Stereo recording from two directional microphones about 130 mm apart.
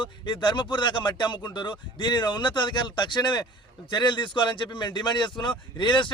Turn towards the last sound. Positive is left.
turn(degrees=35)  # may be behind; listen again after turning